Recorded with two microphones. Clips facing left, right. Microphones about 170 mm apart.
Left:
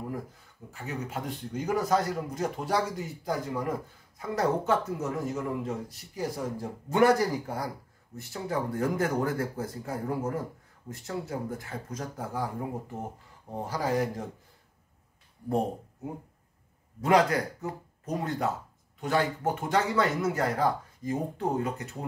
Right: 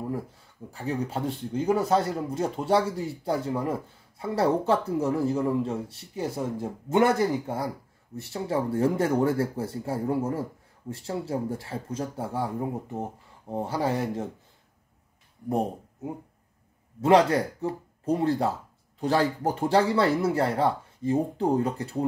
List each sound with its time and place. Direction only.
0.7 s speech: 35° right (ahead or behind)
13.5 s speech: 25° right (ahead or behind)
17.0 s speech: 30° right (ahead or behind)